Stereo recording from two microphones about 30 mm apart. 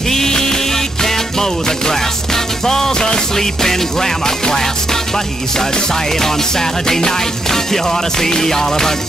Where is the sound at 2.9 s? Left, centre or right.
Left.